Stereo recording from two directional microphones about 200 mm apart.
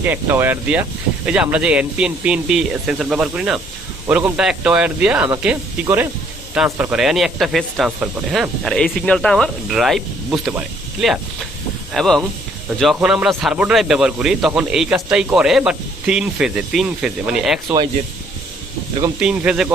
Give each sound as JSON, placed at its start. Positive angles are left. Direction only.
{"t": 0.0, "sound": "speech", "side_deg": -10}
{"t": 19.2, "sound": "speech", "side_deg": -5}